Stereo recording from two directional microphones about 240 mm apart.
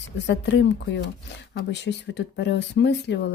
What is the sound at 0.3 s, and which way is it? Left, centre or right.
A woman's voice, left.